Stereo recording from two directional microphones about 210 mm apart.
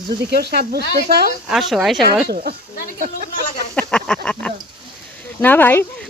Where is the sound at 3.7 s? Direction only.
5° left (ahead or behind).